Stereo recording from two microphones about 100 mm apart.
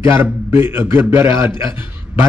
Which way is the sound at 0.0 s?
25° right (ahead or behind).